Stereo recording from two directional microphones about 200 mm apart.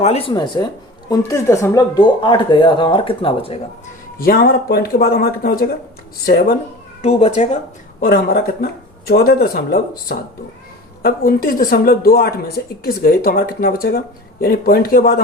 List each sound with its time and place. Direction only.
0.0 s speech: 30° left (ahead or behind)
4.2 s speech: 45° left (ahead or behind)
7.0 s speech: 35° left (ahead or behind)
8.0 s speech: 50° left (ahead or behind)